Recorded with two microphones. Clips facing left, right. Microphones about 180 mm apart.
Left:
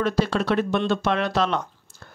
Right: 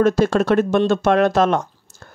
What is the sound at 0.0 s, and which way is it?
Speech, 45° right (ahead or behind).